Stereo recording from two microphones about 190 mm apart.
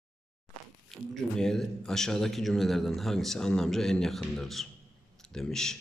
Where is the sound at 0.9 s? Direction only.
Centre (ahead or behind).